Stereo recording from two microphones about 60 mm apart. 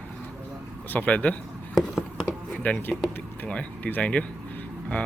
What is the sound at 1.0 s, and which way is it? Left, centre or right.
Speech, left.